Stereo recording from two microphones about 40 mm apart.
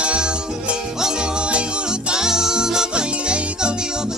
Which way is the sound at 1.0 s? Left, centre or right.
Centre.